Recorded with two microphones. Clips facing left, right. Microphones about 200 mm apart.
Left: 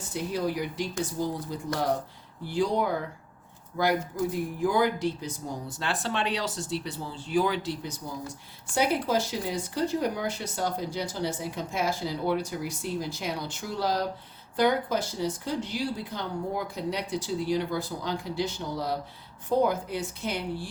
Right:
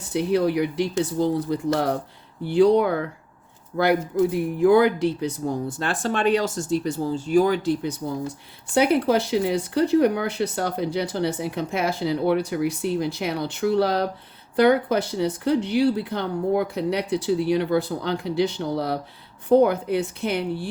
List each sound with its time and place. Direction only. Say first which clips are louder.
0.1 s speech: right 9 dB; 65° right (ahead or behind)